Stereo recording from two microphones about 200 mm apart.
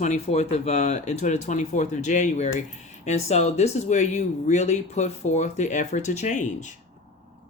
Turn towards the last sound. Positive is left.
turn(degrees=35)  # may be behind; listen again after turning